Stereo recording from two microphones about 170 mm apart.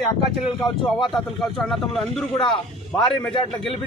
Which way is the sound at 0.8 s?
Centre (ahead or behind).